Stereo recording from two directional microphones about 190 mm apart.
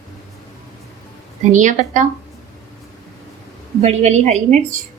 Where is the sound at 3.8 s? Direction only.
35° right (ahead or behind).